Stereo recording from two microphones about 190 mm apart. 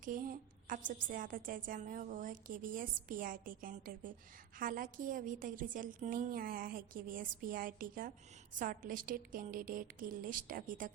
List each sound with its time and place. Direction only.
0.0 s a woman's voice: 45° right (ahead or behind)